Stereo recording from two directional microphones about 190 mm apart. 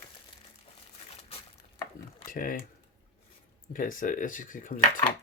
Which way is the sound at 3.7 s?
45° left (ahead or behind).